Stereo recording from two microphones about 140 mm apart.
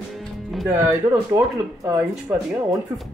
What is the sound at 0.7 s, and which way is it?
Speech, 20° right (ahead or behind).